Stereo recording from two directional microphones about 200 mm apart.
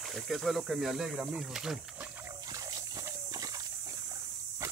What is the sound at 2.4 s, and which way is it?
Dog, 20° right (ahead or behind).